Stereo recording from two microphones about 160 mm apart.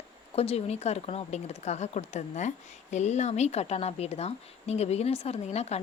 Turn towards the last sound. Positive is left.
turn(degrees=40)  # may be behind; listen again after turning